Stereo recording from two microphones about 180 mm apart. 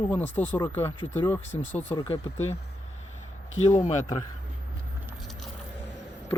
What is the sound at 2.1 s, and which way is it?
Speech, 35° left (ahead or behind).